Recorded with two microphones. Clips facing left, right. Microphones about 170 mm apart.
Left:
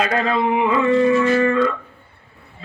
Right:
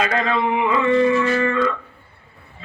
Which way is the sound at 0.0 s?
35° left (ahead or behind).